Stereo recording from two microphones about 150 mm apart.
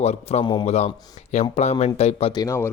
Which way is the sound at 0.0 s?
45° left (ahead or behind).